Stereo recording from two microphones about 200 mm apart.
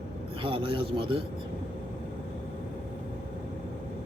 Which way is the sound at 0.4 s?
25° right (ahead or behind).